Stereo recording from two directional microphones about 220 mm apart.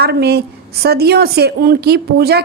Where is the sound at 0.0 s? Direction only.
45° right (ahead or behind).